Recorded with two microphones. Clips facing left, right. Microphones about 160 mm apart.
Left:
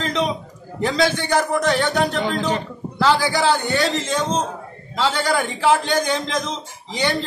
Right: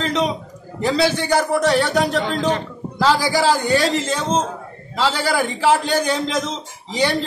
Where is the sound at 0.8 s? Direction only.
5° right (ahead or behind).